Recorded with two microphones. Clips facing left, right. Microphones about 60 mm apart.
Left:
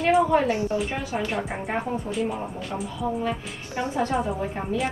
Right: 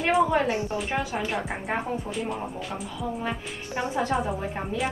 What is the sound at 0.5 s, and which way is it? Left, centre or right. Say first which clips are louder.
Speech: left 3 dB; right.